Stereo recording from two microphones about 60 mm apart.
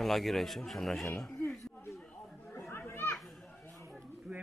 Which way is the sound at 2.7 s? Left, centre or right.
Left.